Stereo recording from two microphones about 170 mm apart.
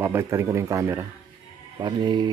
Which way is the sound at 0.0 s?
15° right (ahead or behind).